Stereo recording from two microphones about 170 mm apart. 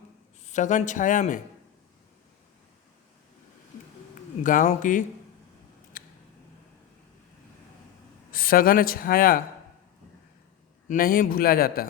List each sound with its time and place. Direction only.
0.4 s speech: 45° left (ahead or behind)
4.4 s speech: 50° left (ahead or behind)
6.0 s a sound: 55° left (ahead or behind)
8.3 s speech: 55° left (ahead or behind)
10.8 s speech: 55° left (ahead or behind)